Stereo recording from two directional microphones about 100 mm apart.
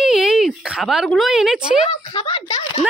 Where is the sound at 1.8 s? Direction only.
65° left (ahead or behind).